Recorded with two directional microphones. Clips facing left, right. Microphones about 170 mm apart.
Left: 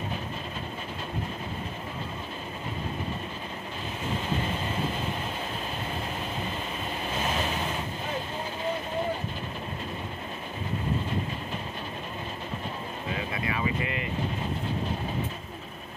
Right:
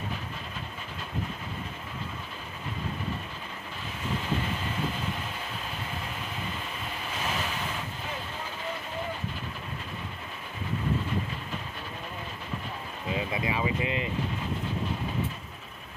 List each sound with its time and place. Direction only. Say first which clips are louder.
13.1 s speech: right 3 dB; 20° right (ahead or behind)